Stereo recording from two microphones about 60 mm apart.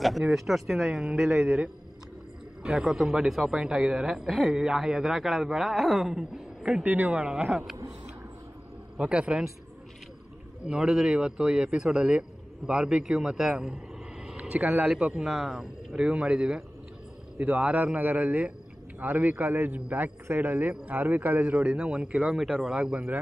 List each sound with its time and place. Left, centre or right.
0.3 s speech: centre
2.6 s a man's voice: centre
6.8 s a man's voice: right
7.2 s speech: centre
8.9 s speech: centre
10.7 s speech: centre
14.2 s vehicle: centre
15.1 s speech: centre
17.4 s a man's voice: right